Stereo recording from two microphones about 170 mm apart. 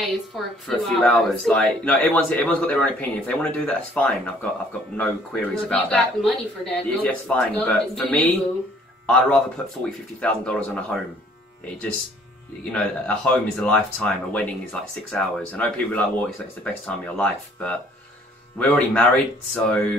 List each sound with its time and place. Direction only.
0.3 s a man's voice: centre (ahead or behind)
12.7 s speech: 5° left (ahead or behind)